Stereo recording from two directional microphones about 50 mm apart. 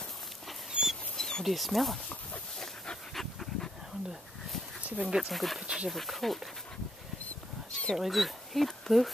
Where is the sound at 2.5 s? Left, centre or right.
Centre.